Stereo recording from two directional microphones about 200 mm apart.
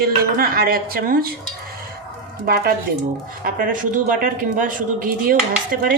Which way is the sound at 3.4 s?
45° right (ahead or behind).